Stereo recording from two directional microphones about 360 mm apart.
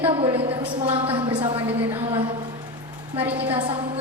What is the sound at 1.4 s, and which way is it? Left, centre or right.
A woman's voice, centre.